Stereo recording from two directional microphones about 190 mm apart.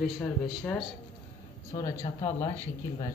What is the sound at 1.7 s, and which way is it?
Speech, 20° left (ahead or behind).